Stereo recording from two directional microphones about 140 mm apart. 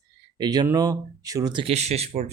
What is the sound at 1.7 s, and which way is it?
Speech, 50° right (ahead or behind).